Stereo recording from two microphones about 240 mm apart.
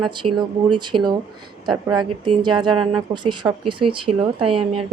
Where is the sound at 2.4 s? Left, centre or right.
Centre.